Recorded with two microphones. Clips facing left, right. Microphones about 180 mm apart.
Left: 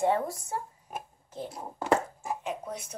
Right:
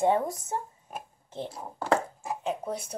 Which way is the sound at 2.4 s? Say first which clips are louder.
Right 4 dB; 30° right (ahead or behind).